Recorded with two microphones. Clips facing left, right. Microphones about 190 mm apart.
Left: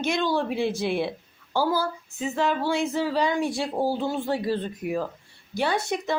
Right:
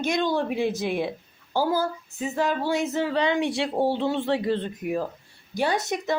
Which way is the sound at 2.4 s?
45° right (ahead or behind).